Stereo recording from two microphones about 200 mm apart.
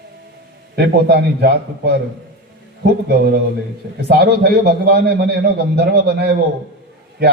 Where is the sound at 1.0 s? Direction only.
55° right (ahead or behind).